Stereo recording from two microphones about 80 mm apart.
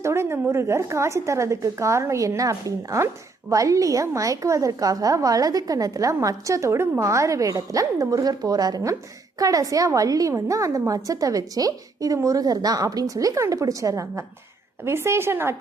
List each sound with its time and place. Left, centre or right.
0.0 s a woman's voice: right